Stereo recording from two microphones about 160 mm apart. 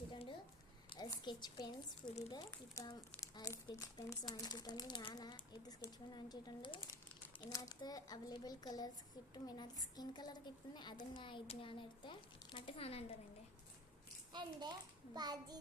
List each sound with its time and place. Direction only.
0.1 s a sound: 30° left (ahead or behind)
0.9 s a woman's voice: 25° left (ahead or behind)
2.8 s speech: 25° left (ahead or behind)
14.3 s a child's voice: 25° right (ahead or behind)